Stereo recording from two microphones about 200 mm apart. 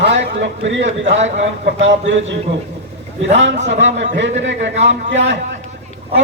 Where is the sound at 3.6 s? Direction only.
65° right (ahead or behind).